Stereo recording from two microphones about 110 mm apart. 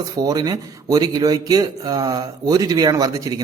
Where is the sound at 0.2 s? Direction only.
35° right (ahead or behind).